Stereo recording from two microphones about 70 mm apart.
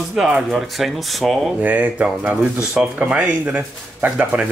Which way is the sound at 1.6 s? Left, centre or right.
Right.